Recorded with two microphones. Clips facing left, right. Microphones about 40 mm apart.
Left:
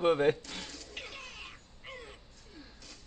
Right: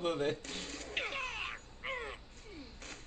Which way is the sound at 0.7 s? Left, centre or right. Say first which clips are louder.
Right 6 dB; right.